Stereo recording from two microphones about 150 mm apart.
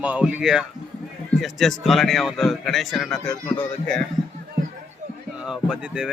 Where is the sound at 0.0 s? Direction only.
10° right (ahead or behind); by 4.0 s 10° left (ahead or behind).